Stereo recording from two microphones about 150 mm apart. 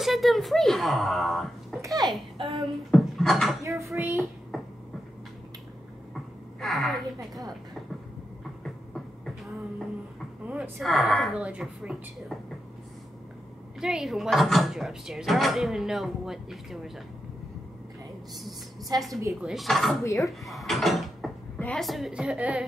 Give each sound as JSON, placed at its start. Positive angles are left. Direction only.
{"t": 0.0, "sound": "speech", "side_deg": 0}
{"t": 1.8, "sound": "a child's voice", "side_deg": -25}
{"t": 2.4, "sound": "speech", "side_deg": 0}
{"t": 3.6, "sound": "speech", "side_deg": -20}
{"t": 4.5, "sound": "beatboxing", "side_deg": 0}
{"t": 6.6, "sound": "speech", "side_deg": 0}
{"t": 8.6, "sound": "beatboxing", "side_deg": 0}
{"t": 10.4, "sound": "speech", "side_deg": -10}
{"t": 13.7, "sound": "speech", "side_deg": -5}
{"t": 18.9, "sound": "speech", "side_deg": 0}